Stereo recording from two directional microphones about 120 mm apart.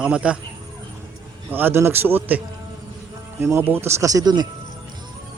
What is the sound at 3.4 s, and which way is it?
Speech, 20° right (ahead or behind).